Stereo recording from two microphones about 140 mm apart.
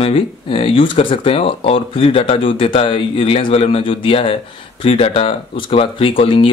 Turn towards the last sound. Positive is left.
turn(degrees=40)  # may be behind; listen again after turning